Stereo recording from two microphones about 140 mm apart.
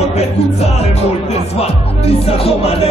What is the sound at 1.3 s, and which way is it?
Music, 45° left (ahead or behind).